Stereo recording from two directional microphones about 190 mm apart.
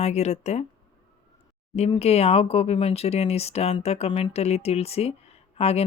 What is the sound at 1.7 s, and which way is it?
Speech, 35° left (ahead or behind).